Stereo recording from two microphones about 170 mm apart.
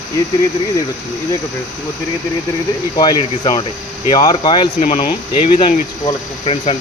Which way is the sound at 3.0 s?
30° left (ahead or behind).